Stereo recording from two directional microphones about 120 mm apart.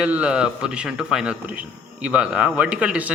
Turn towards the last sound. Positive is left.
turn(degrees=-10)  # may be behind; listen again after turning